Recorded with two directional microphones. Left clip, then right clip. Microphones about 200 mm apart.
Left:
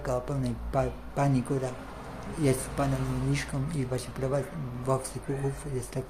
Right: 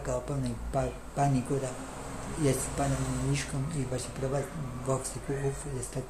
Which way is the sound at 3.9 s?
25° left (ahead or behind).